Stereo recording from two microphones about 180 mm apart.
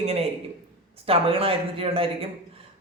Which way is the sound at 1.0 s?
30° right (ahead or behind).